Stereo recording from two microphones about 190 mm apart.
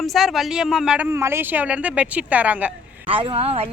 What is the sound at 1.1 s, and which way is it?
Speech, 15° right (ahead or behind).